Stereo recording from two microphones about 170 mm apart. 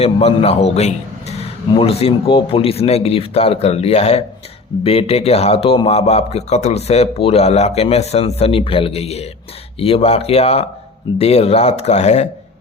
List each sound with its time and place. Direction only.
0.0 s a man's voice: 35° left (ahead or behind)